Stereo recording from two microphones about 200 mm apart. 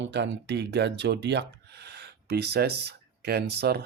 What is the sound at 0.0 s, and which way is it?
Speech, 65° right (ahead or behind).